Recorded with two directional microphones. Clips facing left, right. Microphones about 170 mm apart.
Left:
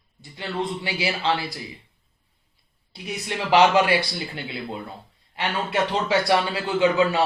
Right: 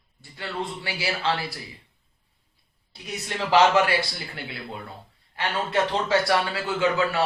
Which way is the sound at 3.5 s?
15° left (ahead or behind).